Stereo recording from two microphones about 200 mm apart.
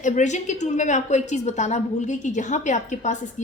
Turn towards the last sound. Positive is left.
turn(degrees=35)  # may be behind; listen again after turning